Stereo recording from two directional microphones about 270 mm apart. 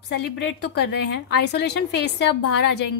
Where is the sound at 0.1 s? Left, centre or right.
Left.